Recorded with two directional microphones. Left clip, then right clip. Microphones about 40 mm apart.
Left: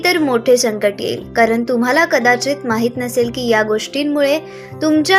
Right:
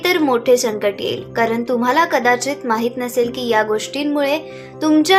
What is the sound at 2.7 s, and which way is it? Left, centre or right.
Speech, left.